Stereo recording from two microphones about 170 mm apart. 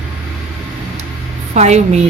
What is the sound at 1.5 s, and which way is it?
Speech, 40° right (ahead or behind).